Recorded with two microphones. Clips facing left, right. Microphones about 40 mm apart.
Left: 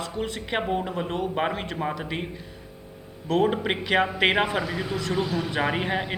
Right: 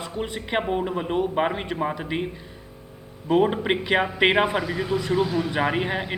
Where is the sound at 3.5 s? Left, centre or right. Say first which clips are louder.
Right 2 dB; centre.